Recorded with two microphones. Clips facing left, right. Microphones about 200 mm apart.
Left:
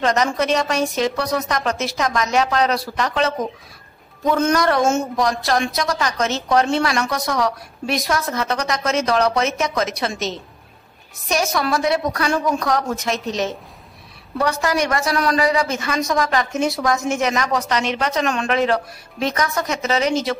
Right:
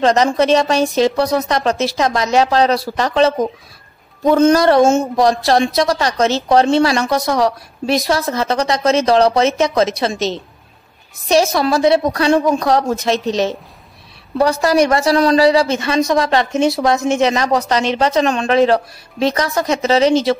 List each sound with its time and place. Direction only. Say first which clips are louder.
0.0 s a woman's voice: right 6 dB; 30° right (ahead or behind)